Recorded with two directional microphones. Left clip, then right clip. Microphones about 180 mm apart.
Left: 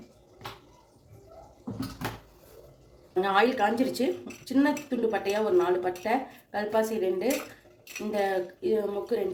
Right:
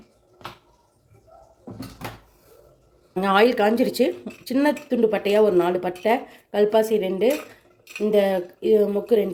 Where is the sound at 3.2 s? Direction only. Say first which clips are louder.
Right 6 dB; 60° right (ahead or behind).